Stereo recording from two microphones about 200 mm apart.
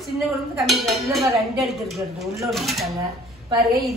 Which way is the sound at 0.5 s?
Centre (ahead or behind).